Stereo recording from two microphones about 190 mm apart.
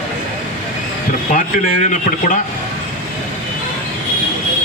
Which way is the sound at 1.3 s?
40° left (ahead or behind).